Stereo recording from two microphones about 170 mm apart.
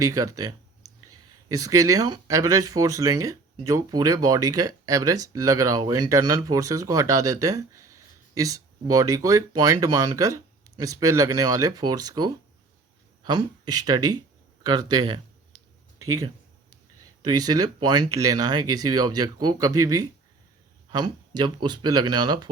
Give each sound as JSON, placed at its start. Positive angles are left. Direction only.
{"t": 0.0, "sound": "speech", "side_deg": -20}
{"t": 14.6, "sound": "a sound", "side_deg": -25}
{"t": 17.2, "sound": "speech", "side_deg": -25}